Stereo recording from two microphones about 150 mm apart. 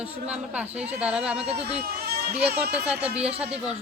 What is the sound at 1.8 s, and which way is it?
Speech, 90° right.